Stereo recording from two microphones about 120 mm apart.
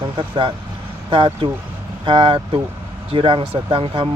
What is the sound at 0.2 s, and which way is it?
Speech, 40° right (ahead or behind).